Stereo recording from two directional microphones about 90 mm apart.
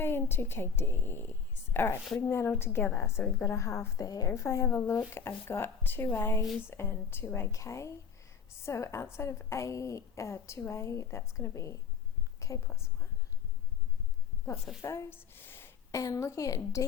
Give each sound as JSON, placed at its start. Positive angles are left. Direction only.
{"t": 0.0, "sound": "a woman's voice", "side_deg": 25}
{"t": 4.3, "sound": "a woman's voice", "side_deg": 30}
{"t": 12.4, "sound": "a sound", "side_deg": 35}
{"t": 12.6, "sound": "a woman's voice", "side_deg": 30}
{"t": 14.8, "sound": "a woman's voice", "side_deg": 35}
{"t": 15.1, "sound": "a sound", "side_deg": 25}
{"t": 15.9, "sound": "a woman's voice", "side_deg": 40}